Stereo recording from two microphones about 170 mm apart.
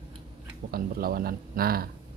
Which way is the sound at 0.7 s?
60° right (ahead or behind).